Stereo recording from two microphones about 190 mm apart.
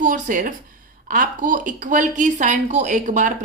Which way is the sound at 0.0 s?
45° right (ahead or behind).